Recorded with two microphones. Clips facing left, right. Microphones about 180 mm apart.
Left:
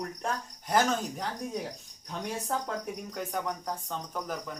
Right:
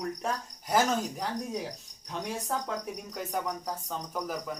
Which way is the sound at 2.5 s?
Centre (ahead or behind).